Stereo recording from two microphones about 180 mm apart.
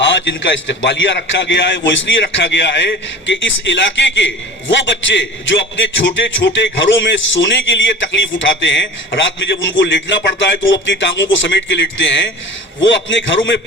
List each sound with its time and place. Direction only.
0.0 s a man's voice: 85° left